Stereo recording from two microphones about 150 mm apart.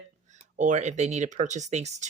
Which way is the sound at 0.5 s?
55° right (ahead or behind).